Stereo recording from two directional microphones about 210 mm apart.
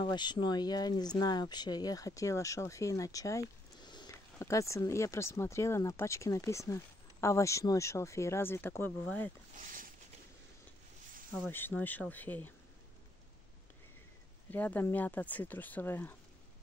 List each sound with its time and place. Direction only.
0.0 s speech: 20° left (ahead or behind)
9.6 s a sound: 40° right (ahead or behind)
11.3 s speech: 10° left (ahead or behind)
14.5 s speech: 10° left (ahead or behind)